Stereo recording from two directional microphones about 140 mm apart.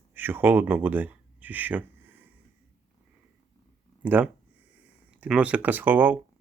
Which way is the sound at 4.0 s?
10° right (ahead or behind).